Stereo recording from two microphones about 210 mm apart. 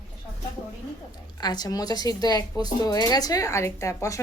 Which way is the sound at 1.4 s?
20° left (ahead or behind).